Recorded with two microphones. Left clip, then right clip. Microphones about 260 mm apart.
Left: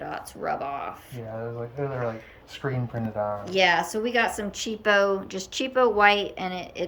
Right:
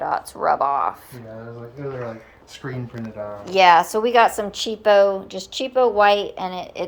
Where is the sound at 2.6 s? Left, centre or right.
Centre.